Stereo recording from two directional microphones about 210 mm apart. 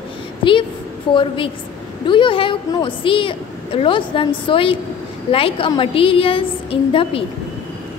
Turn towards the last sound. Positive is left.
turn(degrees=25)  # may be behind; listen again after turning